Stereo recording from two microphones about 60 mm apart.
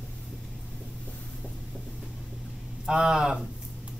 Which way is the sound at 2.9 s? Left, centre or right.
Centre.